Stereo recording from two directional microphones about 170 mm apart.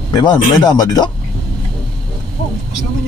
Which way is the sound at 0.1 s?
25° left (ahead or behind).